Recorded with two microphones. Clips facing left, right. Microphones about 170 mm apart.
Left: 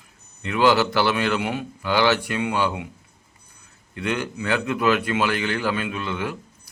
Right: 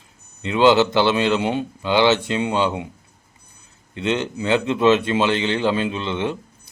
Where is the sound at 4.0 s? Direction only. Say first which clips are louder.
Right 4 dB; 20° right (ahead or behind).